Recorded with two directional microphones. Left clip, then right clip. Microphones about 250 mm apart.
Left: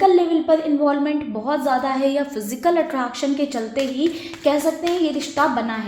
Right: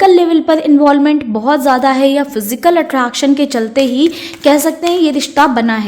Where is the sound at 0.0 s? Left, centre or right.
Right.